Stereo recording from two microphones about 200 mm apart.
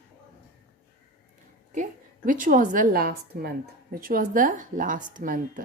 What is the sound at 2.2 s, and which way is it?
A woman's voice, 40° right (ahead or behind).